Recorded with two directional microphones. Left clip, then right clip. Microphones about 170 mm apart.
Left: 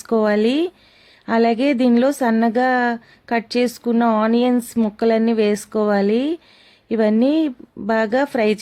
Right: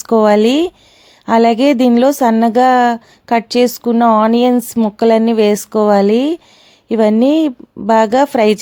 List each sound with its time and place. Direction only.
0.0 s a woman's voice: 30° right (ahead or behind)